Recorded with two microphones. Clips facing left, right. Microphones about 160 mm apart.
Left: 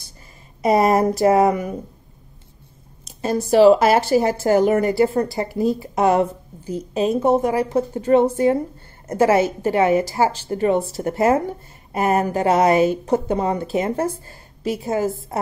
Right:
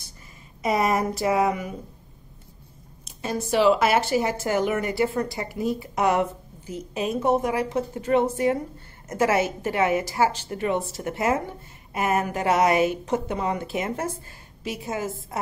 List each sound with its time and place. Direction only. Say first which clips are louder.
0.6 s speech: left 7 dB; 35° left (ahead or behind)
3.1 s speech: left 7 dB; 35° left (ahead or behind)